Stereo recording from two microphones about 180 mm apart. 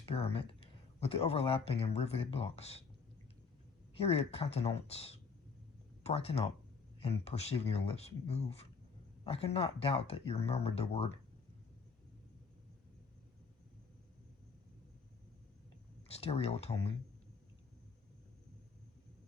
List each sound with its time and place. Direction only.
0.0 s speech: 35° left (ahead or behind)
3.9 s speech: 35° left (ahead or behind)
16.1 s speech: 35° left (ahead or behind)